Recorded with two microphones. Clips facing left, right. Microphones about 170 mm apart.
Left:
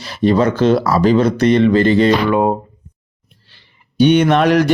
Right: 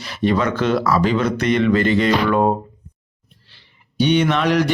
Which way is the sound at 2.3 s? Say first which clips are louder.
Left 2 dB; 10° left (ahead or behind).